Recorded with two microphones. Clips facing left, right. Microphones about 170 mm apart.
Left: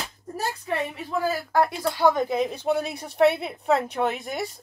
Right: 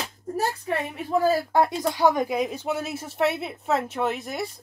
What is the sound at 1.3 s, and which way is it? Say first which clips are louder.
Speech: right 2 dB; 25° right (ahead or behind).